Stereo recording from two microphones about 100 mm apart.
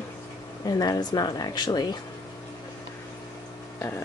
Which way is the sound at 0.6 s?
40° left (ahead or behind).